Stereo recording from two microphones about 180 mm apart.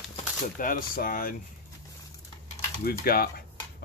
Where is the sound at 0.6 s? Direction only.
50° left (ahead or behind).